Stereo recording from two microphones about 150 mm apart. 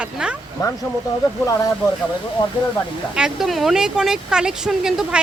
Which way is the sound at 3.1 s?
5° right (ahead or behind).